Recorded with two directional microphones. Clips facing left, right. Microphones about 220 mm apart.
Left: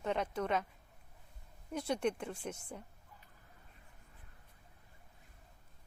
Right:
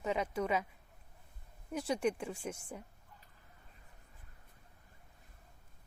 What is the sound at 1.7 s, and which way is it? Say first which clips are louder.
Speech: right 1 dB; 5° right (ahead or behind).